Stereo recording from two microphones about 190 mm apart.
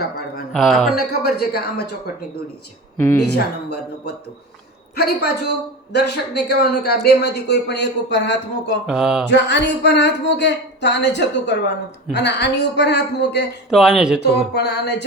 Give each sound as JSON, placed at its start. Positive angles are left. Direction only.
{"t": 0.5, "sound": "speech", "side_deg": 0}
{"t": 0.9, "sound": "speech", "side_deg": 55}
{"t": 3.3, "sound": "speech", "side_deg": 60}
{"t": 8.9, "sound": "speech", "side_deg": -5}
{"t": 9.3, "sound": "speech", "side_deg": 65}
{"t": 13.7, "sound": "speech", "side_deg": 0}
{"t": 14.2, "sound": "speech", "side_deg": 60}